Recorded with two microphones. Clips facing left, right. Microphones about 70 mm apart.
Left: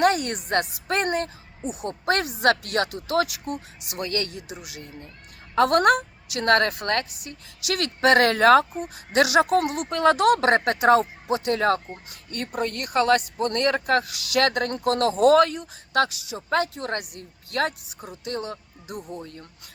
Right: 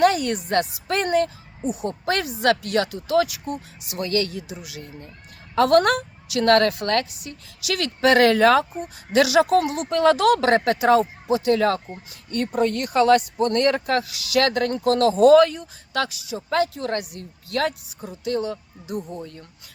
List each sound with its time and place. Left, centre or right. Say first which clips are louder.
0.0 s a woman's voice: right 2 dB; left
0.9 s a woman's voice: right 4 dB; left
5.5 s a woman's voice: right 1 dB; left
7.6 s a woman's voice: right 1 dB; left